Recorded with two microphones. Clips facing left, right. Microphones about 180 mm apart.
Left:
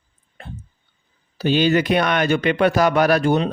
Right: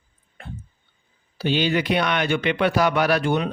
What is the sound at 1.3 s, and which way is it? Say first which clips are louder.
Speech: left 5 dB; 45° left (ahead or behind).